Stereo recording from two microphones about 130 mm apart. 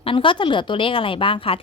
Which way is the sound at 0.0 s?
40° left (ahead or behind).